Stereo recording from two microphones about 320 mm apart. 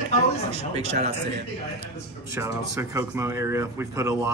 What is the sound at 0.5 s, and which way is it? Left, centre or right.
Speech, centre.